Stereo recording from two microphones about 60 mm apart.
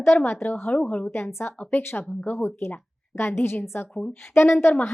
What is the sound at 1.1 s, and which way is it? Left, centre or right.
A woman's voice, left.